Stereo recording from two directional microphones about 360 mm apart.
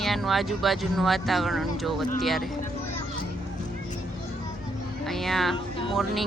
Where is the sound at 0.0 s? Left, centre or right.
Centre.